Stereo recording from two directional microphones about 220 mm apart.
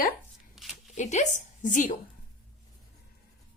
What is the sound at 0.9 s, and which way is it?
Speech, 30° left (ahead or behind).